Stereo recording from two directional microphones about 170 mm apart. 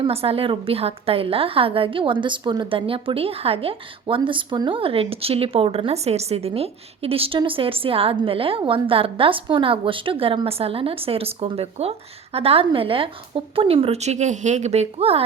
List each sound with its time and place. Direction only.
0.0 s a woman's voice: 35° right (ahead or behind)